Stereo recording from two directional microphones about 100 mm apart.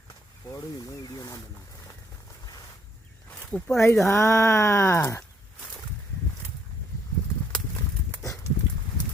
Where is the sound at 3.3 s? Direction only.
15° left (ahead or behind).